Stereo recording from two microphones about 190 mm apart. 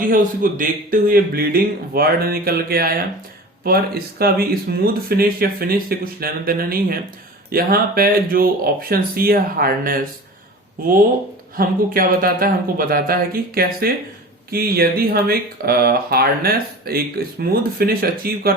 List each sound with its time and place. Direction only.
0.0 s speech: 45° right (ahead or behind)
11.5 s speech: 50° right (ahead or behind)